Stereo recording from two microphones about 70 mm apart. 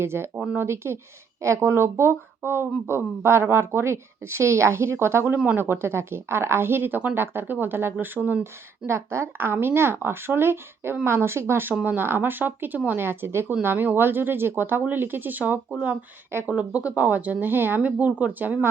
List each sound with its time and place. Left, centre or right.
0.0 s speech: right
8.9 s speech: right